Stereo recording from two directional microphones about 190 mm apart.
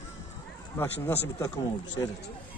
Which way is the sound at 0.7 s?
10° left (ahead or behind).